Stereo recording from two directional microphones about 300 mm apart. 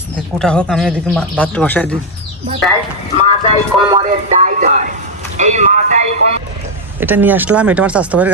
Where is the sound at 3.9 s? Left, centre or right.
Centre.